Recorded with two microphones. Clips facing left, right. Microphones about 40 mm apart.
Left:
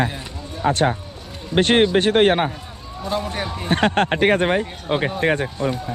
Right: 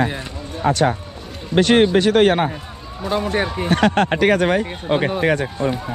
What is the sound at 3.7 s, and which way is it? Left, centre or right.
Speech, left.